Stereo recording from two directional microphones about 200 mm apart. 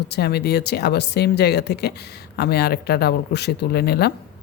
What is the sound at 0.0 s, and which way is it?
Speech, 55° left (ahead or behind).